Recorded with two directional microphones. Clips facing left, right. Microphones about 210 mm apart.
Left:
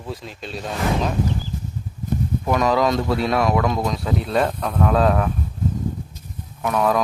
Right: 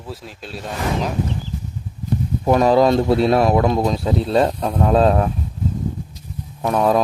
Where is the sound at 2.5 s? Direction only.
35° right (ahead or behind).